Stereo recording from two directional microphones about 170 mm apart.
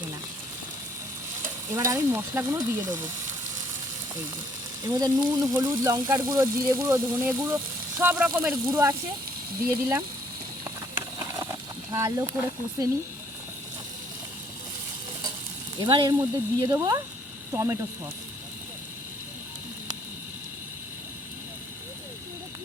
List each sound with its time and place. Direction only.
1.7 s speech: 15° right (ahead or behind)
4.8 s speech: 20° right (ahead or behind)
10.6 s a sound: 15° right (ahead or behind)
15.8 s speech: 25° right (ahead or behind)